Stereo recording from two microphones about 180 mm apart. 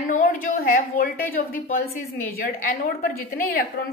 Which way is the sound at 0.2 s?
50° left (ahead or behind).